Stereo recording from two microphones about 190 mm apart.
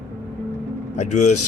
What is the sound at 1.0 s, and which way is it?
Speech, 40° left (ahead or behind).